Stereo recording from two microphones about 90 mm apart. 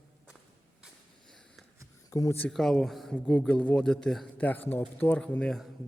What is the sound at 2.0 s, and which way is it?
Speech, 40° left (ahead or behind).